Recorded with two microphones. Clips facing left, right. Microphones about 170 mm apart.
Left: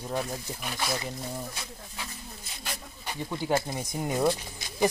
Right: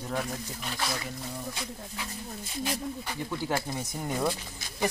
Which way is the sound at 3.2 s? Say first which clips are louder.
Left 4 dB; 20° left (ahead or behind).